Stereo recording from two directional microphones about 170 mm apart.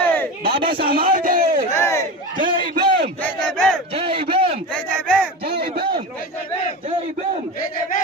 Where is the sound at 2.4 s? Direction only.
30° right (ahead or behind).